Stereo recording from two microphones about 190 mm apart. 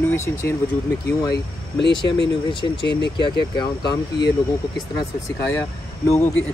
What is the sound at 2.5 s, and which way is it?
Speech, 25° left (ahead or behind).